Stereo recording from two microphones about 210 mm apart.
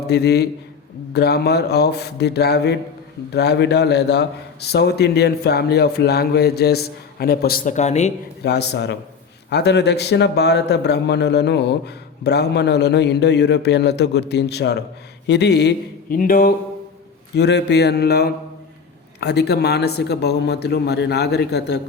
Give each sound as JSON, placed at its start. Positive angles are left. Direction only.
{"t": 0.1, "sound": "speech", "side_deg": 50}
{"t": 8.4, "sound": "speech", "side_deg": 50}